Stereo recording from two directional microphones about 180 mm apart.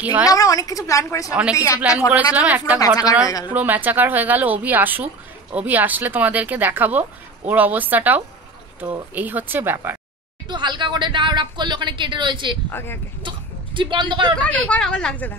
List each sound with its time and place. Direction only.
0.0 s a woman's voice: 10° right (ahead or behind)
0.3 s a woman's voice: 20° left (ahead or behind)
1.3 s a woman's voice: 5° right (ahead or behind)
3.3 s speech: 20° left (ahead or behind)
3.5 s a woman's voice: 10° right (ahead or behind)
10.5 s speech: 25° right (ahead or behind)
12.7 s speech: 10° left (ahead or behind)
13.7 s speech: 25° right (ahead or behind)
14.5 s a woman's voice: 5° left (ahead or behind)